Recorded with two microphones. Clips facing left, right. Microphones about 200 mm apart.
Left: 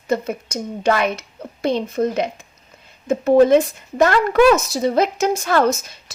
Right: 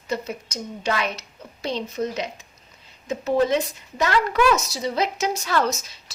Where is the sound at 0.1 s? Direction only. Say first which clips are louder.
Left 7 dB; 50° left (ahead or behind).